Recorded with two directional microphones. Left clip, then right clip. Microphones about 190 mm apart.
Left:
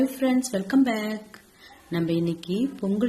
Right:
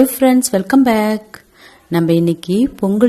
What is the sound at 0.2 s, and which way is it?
A woman's voice, 45° right (ahead or behind).